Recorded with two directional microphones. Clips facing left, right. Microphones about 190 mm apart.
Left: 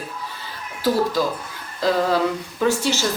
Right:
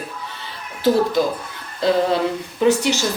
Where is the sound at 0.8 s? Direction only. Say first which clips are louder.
Right 4 dB; 25° right (ahead or behind).